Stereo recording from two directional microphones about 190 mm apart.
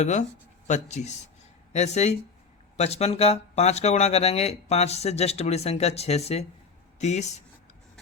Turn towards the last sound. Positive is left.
turn(degrees=35)  # may be behind; listen again after turning